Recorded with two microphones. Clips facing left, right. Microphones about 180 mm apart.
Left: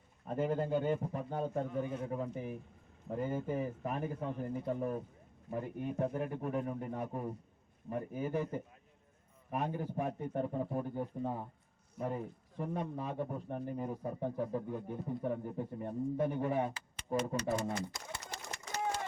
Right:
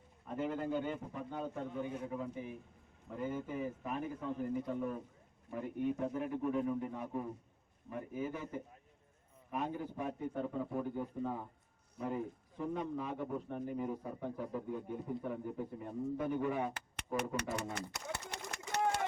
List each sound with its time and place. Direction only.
0.3 s a man's voice: 40° left (ahead or behind)
17.4 s speech: 65° right (ahead or behind)
17.9 s pigeon: 65° right (ahead or behind)
18.7 s run: 65° right (ahead or behind)